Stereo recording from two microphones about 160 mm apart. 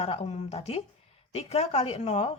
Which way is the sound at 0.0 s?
40° left (ahead or behind).